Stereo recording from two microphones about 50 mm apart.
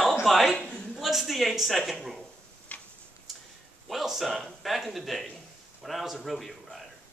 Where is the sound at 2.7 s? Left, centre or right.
Left.